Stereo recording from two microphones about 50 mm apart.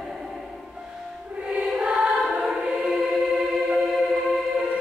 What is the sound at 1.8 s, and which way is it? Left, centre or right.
Choir, centre.